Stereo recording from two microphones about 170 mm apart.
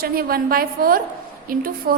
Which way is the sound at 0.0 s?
60° right (ahead or behind).